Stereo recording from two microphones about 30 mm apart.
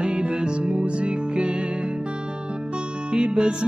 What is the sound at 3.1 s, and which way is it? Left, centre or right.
Music, right.